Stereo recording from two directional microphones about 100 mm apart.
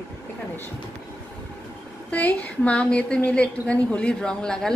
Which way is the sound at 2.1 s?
15° left (ahead or behind).